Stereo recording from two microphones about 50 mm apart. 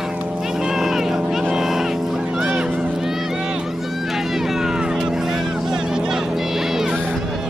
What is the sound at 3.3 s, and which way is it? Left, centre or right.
Vehicle, centre.